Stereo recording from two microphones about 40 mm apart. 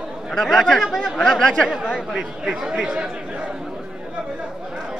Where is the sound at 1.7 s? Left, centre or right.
Centre.